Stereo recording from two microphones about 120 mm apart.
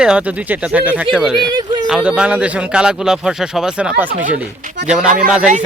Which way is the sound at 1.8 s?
5° right (ahead or behind).